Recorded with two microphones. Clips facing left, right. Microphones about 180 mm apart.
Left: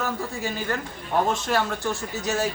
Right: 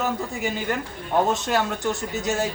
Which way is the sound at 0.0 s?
20° right (ahead or behind).